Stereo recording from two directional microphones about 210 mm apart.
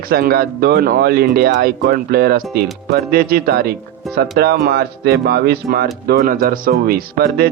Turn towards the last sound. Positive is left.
turn(degrees=-45)  # may be behind; listen again after turning